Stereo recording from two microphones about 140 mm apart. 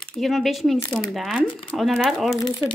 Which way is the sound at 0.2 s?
Centre (ahead or behind).